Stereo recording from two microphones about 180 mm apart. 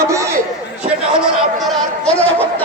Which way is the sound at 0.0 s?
15° right (ahead or behind).